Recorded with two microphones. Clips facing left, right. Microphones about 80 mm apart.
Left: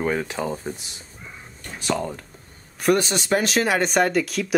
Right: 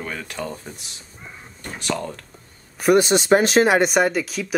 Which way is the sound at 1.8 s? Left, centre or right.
Centre.